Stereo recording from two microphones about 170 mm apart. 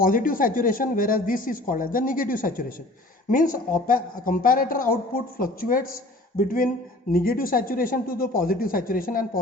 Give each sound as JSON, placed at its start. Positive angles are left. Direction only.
{"t": 0.0, "sound": "speech", "side_deg": 55}